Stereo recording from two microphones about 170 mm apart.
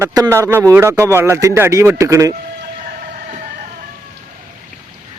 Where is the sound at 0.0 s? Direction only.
15° right (ahead or behind).